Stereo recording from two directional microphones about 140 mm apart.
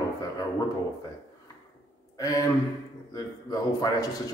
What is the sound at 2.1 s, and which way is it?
A man's voice, 25° left (ahead or behind).